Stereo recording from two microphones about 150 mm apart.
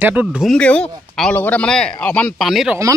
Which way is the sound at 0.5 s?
5° left (ahead or behind).